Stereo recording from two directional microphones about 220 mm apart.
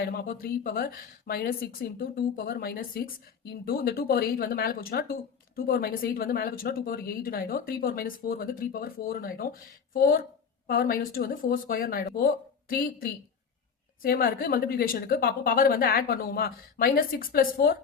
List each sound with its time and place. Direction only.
0.0 s a woman's voice: 45° left (ahead or behind)